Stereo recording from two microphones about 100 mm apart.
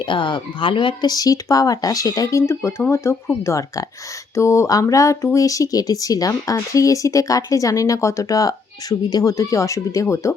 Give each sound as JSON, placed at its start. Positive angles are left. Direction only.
{"t": 0.0, "sound": "speech", "side_deg": 55}
{"t": 1.0, "sound": "speech", "side_deg": 40}